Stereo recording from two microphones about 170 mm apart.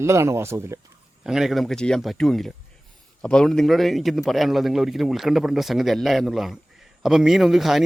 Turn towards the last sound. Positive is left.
turn(degrees=0)  # may be behind; listen again after turning